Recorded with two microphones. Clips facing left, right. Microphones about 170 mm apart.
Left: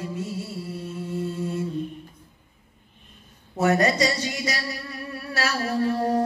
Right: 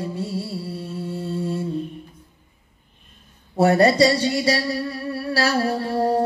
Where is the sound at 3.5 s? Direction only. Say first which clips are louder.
Right 5 dB; 35° right (ahead or behind).